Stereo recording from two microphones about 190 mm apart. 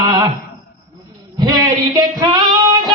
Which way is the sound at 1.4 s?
20° right (ahead or behind).